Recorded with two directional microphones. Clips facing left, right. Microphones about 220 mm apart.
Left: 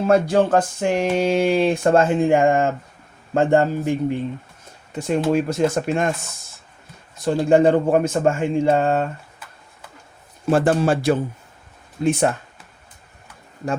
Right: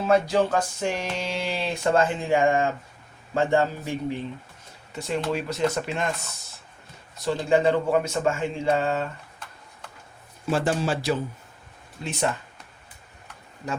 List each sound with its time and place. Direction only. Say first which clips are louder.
0.1 s speech: left 5 dB; 50° left (ahead or behind)
7.3 s speech: left 6 dB; 45° left (ahead or behind)
10.5 s speech: left 7 dB; 55° left (ahead or behind)